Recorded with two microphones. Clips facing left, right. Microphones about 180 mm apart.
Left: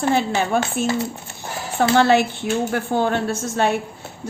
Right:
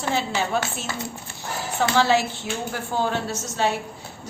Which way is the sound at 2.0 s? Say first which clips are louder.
Left 3 dB; 60° left (ahead or behind).